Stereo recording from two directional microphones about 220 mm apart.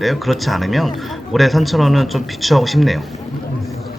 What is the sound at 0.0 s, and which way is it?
Speech, centre (ahead or behind).